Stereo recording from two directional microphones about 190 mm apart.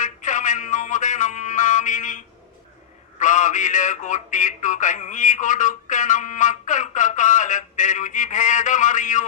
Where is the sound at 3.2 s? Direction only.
40° left (ahead or behind).